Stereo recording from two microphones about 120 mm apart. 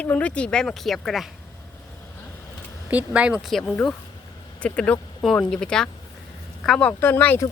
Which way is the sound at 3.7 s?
5° left (ahead or behind).